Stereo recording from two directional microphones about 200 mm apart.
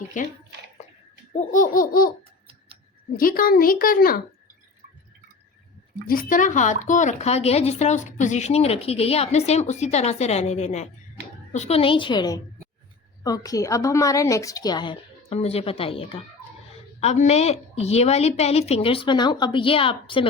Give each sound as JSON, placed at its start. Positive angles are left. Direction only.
{"t": 0.1, "sound": "speech", "side_deg": 40}
{"t": 1.4, "sound": "a child's voice", "side_deg": 40}
{"t": 3.2, "sound": "a child's voice", "side_deg": 45}
{"t": 6.1, "sound": "a woman's voice", "side_deg": 45}